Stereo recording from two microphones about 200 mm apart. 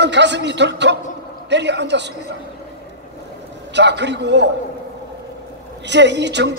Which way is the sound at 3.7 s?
60° right (ahead or behind).